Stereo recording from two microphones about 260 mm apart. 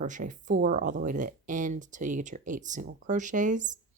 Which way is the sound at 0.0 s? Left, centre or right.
Right.